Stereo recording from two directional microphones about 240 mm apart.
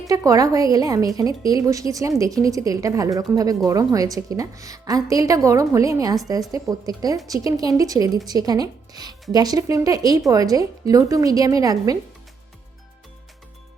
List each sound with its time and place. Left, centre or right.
0.1 s a woman's voice: centre